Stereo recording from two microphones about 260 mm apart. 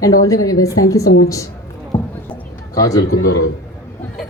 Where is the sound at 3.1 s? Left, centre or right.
Left.